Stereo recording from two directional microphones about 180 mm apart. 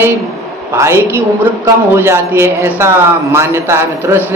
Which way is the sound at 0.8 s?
15° right (ahead or behind).